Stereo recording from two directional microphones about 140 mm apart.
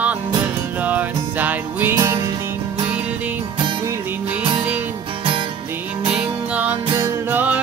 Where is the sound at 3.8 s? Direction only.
20° right (ahead or behind).